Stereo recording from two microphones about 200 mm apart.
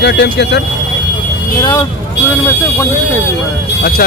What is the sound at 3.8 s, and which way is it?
Speech, 50° left (ahead or behind).